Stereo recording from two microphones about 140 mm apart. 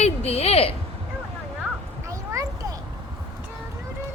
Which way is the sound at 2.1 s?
25° right (ahead or behind).